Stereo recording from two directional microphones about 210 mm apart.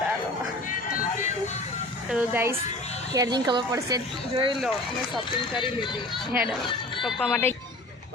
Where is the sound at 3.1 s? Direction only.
20° right (ahead or behind).